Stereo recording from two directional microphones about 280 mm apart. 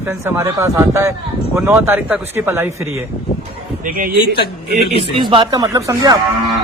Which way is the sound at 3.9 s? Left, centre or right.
Right.